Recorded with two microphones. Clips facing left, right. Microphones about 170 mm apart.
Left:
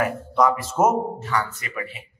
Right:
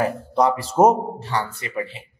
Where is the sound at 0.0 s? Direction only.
30° right (ahead or behind).